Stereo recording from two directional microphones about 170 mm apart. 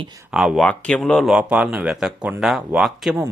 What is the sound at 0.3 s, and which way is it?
Speech, centre (ahead or behind).